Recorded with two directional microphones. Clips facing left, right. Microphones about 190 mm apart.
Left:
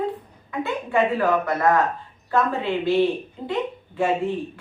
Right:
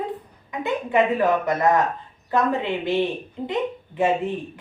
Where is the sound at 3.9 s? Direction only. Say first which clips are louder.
Right 1 dB; 20° right (ahead or behind).